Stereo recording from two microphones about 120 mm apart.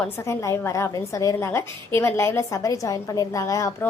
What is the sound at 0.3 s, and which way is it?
A woman's voice, 25° left (ahead or behind).